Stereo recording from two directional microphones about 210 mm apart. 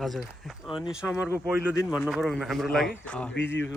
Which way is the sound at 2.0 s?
Centre (ahead or behind).